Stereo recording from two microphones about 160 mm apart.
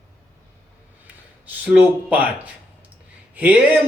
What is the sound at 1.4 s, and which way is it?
Speech, 10° right (ahead or behind).